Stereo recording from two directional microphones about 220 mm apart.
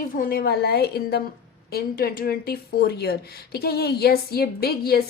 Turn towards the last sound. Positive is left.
turn(degrees=45)  # may be behind; listen again after turning